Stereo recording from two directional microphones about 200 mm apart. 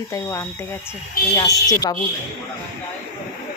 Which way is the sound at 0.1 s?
15° left (ahead or behind).